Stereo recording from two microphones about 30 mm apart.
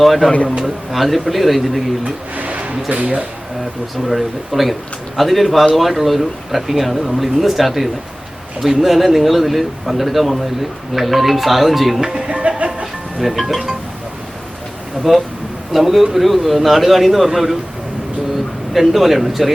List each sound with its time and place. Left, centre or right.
0.0 s a man's voice: centre
2.3 s a sound: right
2.9 s speech: right
4.1 s a man's voice: centre
12.3 s music: right
13.1 s a man's voice: centre
15.1 s a man's voice: centre
18.7 s a man's voice: centre